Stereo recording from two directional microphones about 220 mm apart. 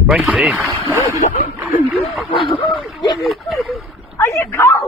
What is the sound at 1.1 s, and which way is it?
Speech, 35° left (ahead or behind).